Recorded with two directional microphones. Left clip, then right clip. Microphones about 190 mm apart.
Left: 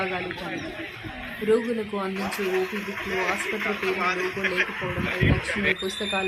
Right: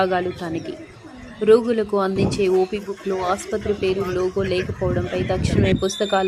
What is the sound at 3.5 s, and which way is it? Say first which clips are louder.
Speech: right 3 dB; 40° right (ahead or behind).